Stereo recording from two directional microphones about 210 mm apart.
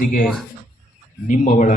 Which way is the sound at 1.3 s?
35° left (ahead or behind).